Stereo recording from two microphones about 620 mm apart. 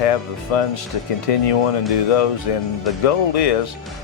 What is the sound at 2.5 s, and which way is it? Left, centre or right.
Speech, left.